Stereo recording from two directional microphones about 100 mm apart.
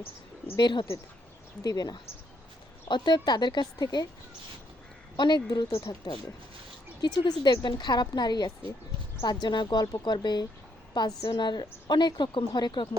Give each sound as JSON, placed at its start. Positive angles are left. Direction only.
{"t": 0.5, "sound": "a woman's voice", "side_deg": 50}
{"t": 5.1, "sound": "a woman's voice", "side_deg": 45}